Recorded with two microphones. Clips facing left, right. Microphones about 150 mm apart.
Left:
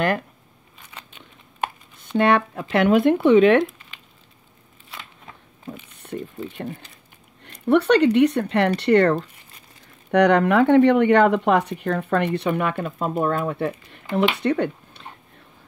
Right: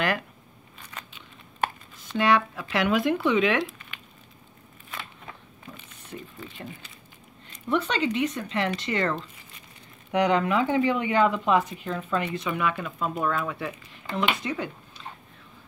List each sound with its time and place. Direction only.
2.0 s speech: 55° left (ahead or behind)
6.0 s speech: 55° left (ahead or behind)
7.4 s speech: 65° left (ahead or behind)
10.1 s speech: 65° left (ahead or behind); by 14.0 s 50° left (ahead or behind)
14.1 s speech: 65° left (ahead or behind)